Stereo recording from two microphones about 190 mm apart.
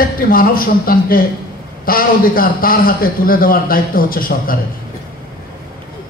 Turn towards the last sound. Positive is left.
turn(degrees=50)  # may be behind; listen again after turning